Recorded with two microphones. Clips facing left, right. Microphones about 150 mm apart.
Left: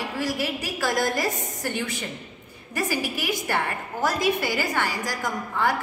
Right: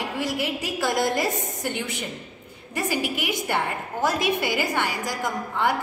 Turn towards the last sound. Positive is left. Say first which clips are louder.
# right 1 dB
turn(degrees=-20)  # may be behind; listen again after turning